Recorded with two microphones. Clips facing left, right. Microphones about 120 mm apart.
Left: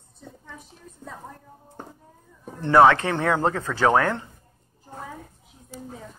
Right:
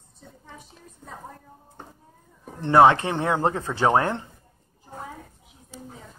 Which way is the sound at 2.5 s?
20° right (ahead or behind).